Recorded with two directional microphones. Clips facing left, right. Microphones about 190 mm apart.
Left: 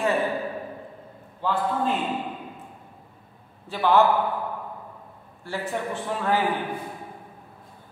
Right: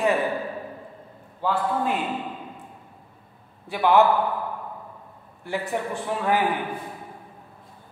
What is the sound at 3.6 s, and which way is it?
Speech, 15° right (ahead or behind).